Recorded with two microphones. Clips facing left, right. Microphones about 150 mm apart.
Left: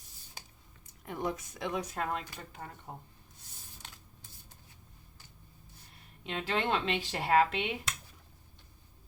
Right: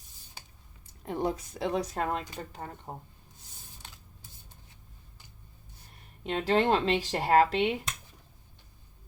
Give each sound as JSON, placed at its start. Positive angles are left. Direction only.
{"t": 1.0, "sound": "speech", "side_deg": -30}
{"t": 6.2, "sound": "speech", "side_deg": -40}